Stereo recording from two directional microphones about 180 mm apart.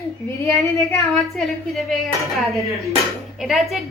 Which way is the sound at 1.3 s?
Centre (ahead or behind).